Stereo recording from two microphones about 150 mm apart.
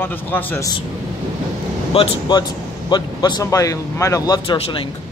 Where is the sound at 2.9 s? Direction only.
30° left (ahead or behind).